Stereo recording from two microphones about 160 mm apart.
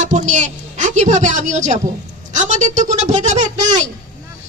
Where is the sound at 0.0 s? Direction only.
50° right (ahead or behind).